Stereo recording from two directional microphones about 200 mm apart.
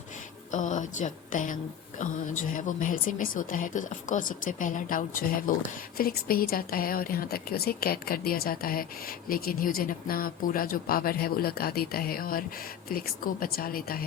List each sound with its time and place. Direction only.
0.5 s a woman's voice: 40° left (ahead or behind)